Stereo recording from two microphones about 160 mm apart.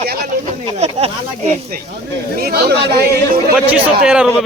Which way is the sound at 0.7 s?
40° right (ahead or behind).